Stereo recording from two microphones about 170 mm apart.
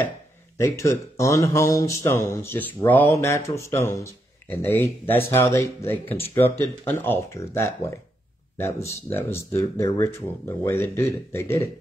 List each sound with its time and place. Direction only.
0.6 s speech: 20° left (ahead or behind)